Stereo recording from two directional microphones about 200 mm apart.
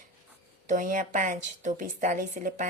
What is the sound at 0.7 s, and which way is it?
A woman's voice, 40° right (ahead or behind).